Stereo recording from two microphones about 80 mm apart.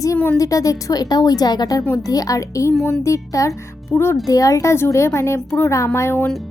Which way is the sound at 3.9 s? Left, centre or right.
Left.